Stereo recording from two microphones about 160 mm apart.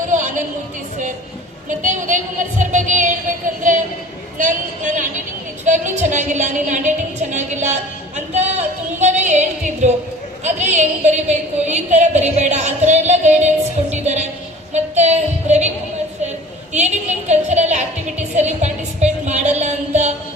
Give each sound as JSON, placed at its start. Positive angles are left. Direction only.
{"t": 0.1, "sound": "a sound", "side_deg": -50}
{"t": 1.8, "sound": "a woman's voice", "side_deg": -50}
{"t": 13.9, "sound": "music", "side_deg": -45}
{"t": 14.7, "sound": "child singing", "side_deg": -45}
{"t": 16.7, "sound": "a sound", "side_deg": -45}
{"t": 18.3, "sound": "music", "side_deg": -45}